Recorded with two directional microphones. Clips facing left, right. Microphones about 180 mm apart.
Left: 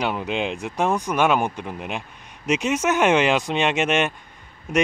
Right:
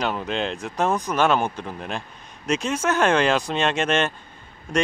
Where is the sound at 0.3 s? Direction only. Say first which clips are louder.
Left 1 dB; 10° left (ahead or behind).